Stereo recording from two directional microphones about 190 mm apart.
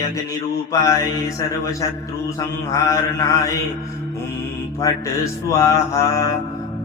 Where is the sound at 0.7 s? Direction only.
20° left (ahead or behind).